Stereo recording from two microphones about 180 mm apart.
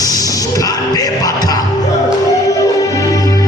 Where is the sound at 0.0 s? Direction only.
20° left (ahead or behind).